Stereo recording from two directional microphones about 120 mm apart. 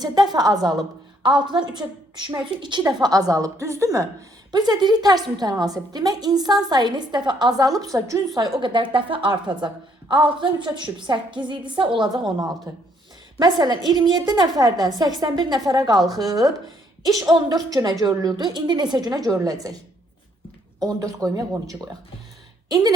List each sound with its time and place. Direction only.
0.0 s a woman's voice: 35° right (ahead or behind)
8.6 s a woman's voice: 45° right (ahead or behind)
13.4 s a woman's voice: 35° right (ahead or behind)